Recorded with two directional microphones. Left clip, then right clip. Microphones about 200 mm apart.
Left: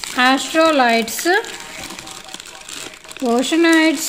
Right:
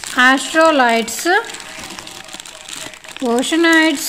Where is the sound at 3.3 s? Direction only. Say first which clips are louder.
Right 1 dB; 10° right (ahead or behind).